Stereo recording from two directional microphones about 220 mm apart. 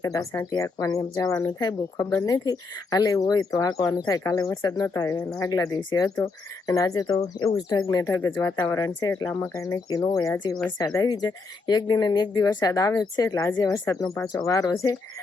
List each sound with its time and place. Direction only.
0.0 s speech: 15° left (ahead or behind)